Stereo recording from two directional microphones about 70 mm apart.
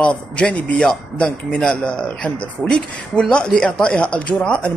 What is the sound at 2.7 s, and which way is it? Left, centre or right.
Speech, centre.